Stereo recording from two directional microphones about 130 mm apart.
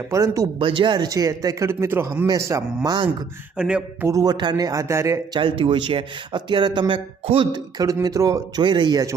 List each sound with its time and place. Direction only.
0.1 s speech: 25° right (ahead or behind)
0.6 s speech: 40° right (ahead or behind)
3.6 s a sound: 10° right (ahead or behind)
4.0 s speech: 25° right (ahead or behind)
5.4 s speech: 40° right (ahead or behind)
7.8 s speech: 25° right (ahead or behind)